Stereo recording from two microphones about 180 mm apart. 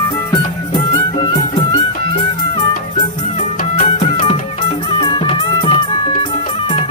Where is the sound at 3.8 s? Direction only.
35° left (ahead or behind).